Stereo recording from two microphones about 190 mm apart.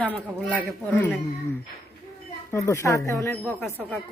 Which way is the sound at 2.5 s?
15° left (ahead or behind).